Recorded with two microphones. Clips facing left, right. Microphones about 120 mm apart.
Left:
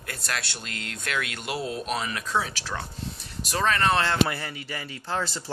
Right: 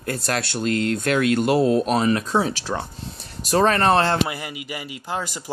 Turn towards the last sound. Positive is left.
turn(degrees=-15)  # may be behind; listen again after turning